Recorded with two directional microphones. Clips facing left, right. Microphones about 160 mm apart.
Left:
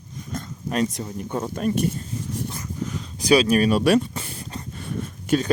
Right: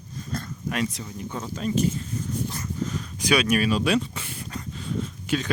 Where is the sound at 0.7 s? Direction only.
40° left (ahead or behind).